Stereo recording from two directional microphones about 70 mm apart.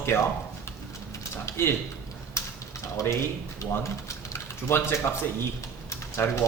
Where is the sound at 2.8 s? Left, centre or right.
Left.